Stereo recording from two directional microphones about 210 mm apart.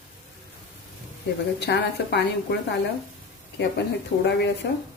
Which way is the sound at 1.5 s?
55° left (ahead or behind).